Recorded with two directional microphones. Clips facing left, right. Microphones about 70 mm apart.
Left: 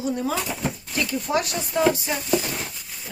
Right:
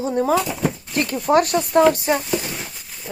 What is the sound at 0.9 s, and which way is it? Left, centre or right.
Speech, right.